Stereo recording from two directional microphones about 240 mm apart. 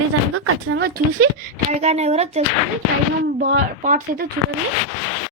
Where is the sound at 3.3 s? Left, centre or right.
Right.